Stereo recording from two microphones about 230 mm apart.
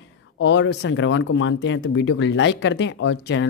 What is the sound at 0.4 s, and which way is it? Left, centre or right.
Speech, left.